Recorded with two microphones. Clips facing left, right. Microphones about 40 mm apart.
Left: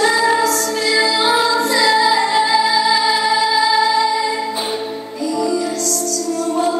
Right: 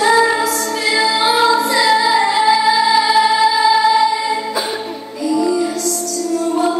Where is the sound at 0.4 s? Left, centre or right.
Right.